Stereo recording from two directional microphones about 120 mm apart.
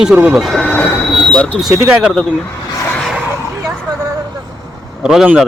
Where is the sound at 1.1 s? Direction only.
5° left (ahead or behind).